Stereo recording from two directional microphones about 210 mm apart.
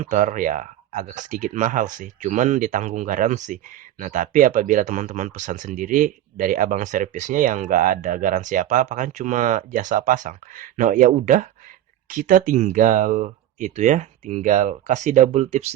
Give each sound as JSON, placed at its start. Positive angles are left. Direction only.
{"t": 0.0, "sound": "speech", "side_deg": -35}